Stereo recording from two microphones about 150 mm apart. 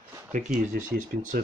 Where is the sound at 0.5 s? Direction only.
65° right (ahead or behind).